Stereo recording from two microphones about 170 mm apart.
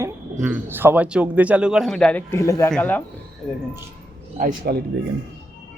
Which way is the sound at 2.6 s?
5° left (ahead or behind).